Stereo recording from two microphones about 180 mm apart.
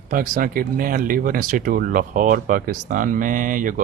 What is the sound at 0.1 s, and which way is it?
Speech, 50° right (ahead or behind).